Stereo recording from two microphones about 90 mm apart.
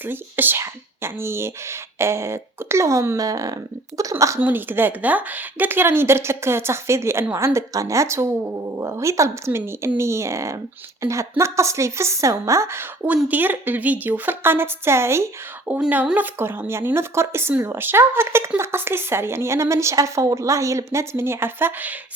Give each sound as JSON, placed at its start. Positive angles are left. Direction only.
{"t": 0.0, "sound": "speech", "side_deg": -20}
{"t": 3.2, "sound": "speech", "side_deg": -45}
{"t": 4.4, "sound": "speech", "side_deg": -20}
{"t": 15.9, "sound": "speech", "side_deg": -15}